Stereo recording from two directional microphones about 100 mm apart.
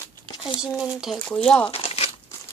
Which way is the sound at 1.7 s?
80° left.